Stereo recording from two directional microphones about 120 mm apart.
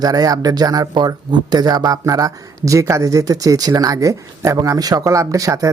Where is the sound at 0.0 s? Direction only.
30° right (ahead or behind).